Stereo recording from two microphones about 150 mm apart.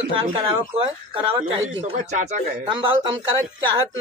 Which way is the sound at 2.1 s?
50° right (ahead or behind).